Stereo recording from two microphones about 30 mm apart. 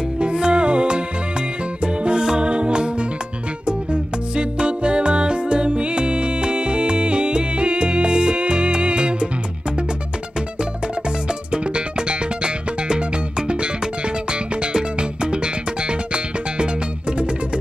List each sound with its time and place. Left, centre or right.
0.2 s music: right
11.5 s music: right
14.6 s music: right